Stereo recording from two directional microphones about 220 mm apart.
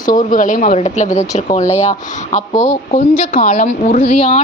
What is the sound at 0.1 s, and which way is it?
A woman's voice, 35° left (ahead or behind).